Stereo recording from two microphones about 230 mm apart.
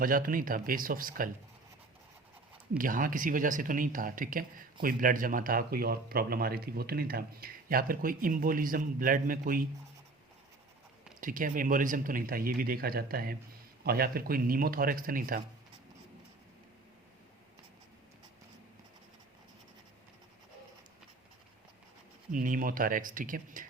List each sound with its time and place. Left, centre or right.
0.0 s speech: right
2.7 s speech: right
11.2 s speech: right
22.3 s speech: right